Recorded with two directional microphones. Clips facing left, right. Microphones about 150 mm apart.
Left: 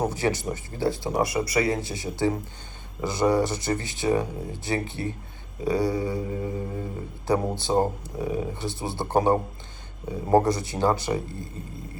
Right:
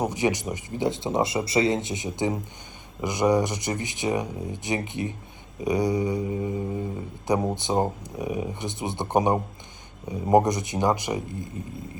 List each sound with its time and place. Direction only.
0.0 s speech: 15° right (ahead or behind)